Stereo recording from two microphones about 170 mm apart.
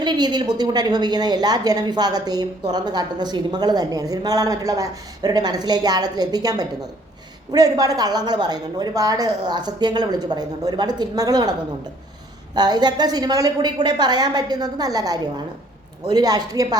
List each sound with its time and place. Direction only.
0.0 s a woman's voice: 25° right (ahead or behind)
12.5 s a woman's voice: 25° right (ahead or behind)